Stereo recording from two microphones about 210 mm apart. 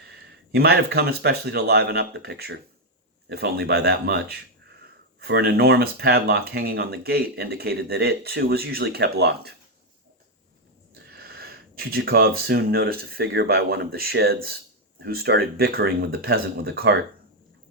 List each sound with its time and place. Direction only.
0.1 s speech: 50° right (ahead or behind)
11.1 s speech: 50° right (ahead or behind)